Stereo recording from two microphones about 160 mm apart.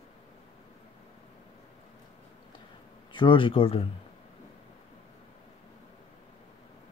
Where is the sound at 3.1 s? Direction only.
30° left (ahead or behind).